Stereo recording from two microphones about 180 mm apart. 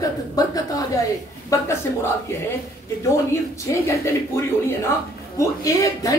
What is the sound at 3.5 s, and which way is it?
Speech, 15° left (ahead or behind).